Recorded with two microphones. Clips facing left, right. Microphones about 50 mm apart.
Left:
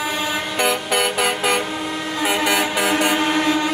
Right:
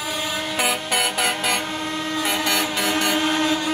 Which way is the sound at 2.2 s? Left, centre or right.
Centre.